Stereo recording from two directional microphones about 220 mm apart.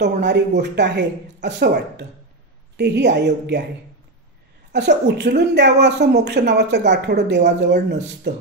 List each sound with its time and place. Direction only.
0.0 s a woman's voice: 50° right (ahead or behind)
3.3 s a woman's voice: 50° right (ahead or behind)
4.7 s a woman's voice: 50° right (ahead or behind)